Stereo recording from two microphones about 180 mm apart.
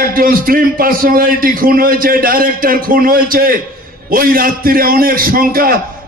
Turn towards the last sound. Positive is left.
turn(degrees=-55)  # may be behind; listen again after turning